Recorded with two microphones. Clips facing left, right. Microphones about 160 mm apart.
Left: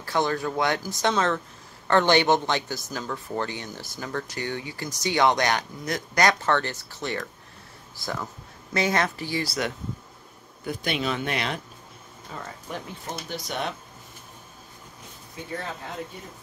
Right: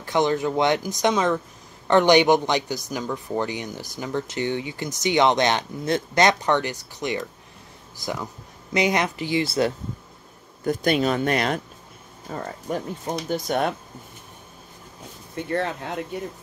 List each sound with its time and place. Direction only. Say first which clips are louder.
0.0 s speech: right 4 dB; 20° right (ahead or behind)
10.6 s speech: right 7 dB; 45° right (ahead or behind)
15.3 s speech: right 8 dB; 70° right (ahead or behind)